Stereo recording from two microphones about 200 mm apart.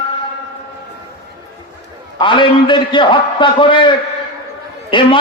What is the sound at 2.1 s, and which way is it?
A man's voice, 25° left (ahead or behind).